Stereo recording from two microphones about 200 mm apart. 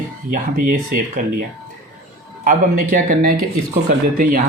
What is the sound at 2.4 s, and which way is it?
Speech, 45° right (ahead or behind).